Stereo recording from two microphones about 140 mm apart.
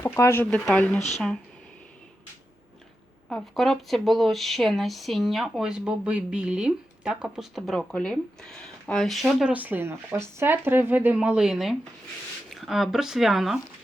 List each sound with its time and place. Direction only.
0.0 s speech: 15° left (ahead or behind)
0.9 s speech: 55° left (ahead or behind)
3.2 s speech: centre (ahead or behind)